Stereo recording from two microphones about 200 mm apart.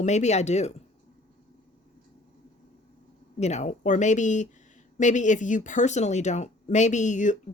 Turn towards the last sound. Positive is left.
turn(degrees=35)  # may be behind; listen again after turning